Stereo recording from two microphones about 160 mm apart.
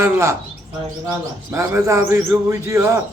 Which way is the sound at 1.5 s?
20° right (ahead or behind).